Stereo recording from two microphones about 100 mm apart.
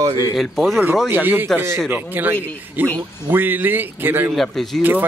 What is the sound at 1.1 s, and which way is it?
A man's voice, 20° right (ahead or behind).